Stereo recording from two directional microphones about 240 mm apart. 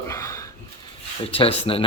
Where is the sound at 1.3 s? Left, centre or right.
Left.